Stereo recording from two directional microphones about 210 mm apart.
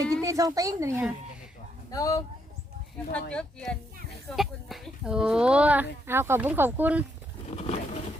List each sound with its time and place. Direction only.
0.2 s speech: 15° right (ahead or behind)
1.9 s speech: 15° left (ahead or behind)
3.1 s speech: 5° left (ahead or behind)
7.4 s a sound: 30° left (ahead or behind)